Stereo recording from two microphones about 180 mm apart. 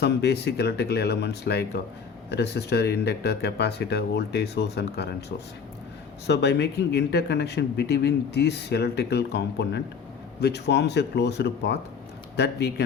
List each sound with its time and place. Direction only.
0.0 s speech: 70° left (ahead or behind)
6.2 s speech: 70° left (ahead or behind)